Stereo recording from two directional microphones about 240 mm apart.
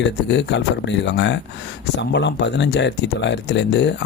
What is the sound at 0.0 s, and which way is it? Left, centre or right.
Speech, left.